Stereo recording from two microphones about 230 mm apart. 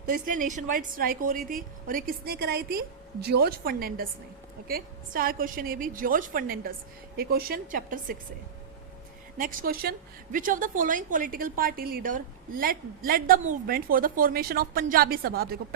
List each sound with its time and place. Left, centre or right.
0.1 s a woman's voice: right
9.4 s a woman's voice: right